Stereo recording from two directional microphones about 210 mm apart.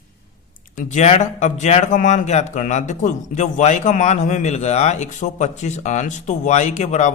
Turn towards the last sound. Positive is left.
turn(degrees=35)  # may be behind; listen again after turning